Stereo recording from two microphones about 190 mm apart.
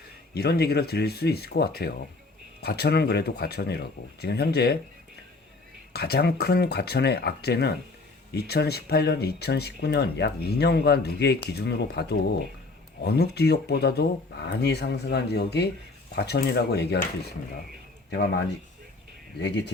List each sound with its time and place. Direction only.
0.3 s speech: 55° left (ahead or behind)
5.9 s speech: 55° left (ahead or behind)
19.4 s speech: 65° left (ahead or behind)